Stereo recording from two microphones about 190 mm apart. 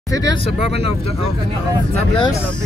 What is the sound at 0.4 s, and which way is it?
Speech, 30° left (ahead or behind).